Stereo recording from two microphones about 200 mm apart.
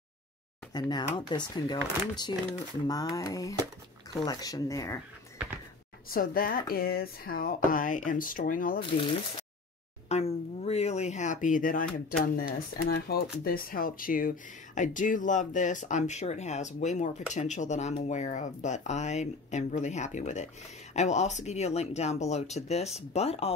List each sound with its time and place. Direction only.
0.7 s speech: 20° left (ahead or behind)
6.0 s speech: 45° left (ahead or behind)
8.7 s speech: 25° left (ahead or behind)